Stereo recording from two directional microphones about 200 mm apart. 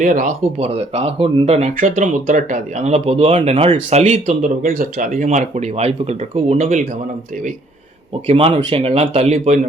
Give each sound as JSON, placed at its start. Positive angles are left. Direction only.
{"t": 0.0, "sound": "speech", "side_deg": -40}
{"t": 8.3, "sound": "speech", "side_deg": -30}